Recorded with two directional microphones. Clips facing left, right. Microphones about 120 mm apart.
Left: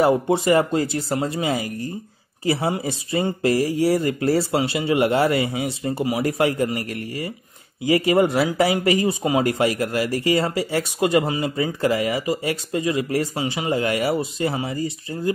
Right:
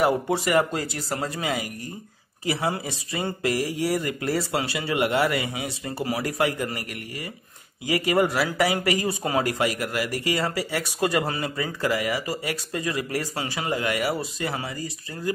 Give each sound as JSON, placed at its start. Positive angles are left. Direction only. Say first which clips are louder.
{"t": 0.0, "sound": "speech", "louder": "left 4 dB", "side_deg": 30}
{"t": 7.8, "sound": "speech", "louder": "left 5 dB", "side_deg": 25}